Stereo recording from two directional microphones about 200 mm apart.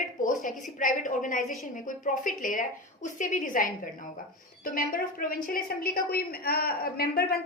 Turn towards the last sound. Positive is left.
turn(degrees=50)  # may be behind; listen again after turning